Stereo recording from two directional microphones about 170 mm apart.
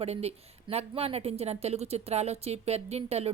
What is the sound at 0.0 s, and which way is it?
Speech, 40° right (ahead or behind).